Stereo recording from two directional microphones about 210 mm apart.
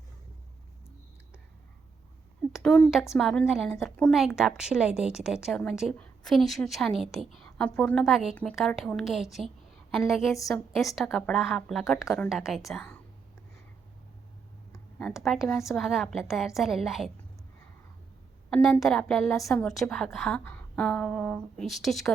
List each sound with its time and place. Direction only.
2.5 s a woman's voice: centre (ahead or behind)
14.7 s a woman's voice: 5° left (ahead or behind)
18.5 s a woman's voice: centre (ahead or behind)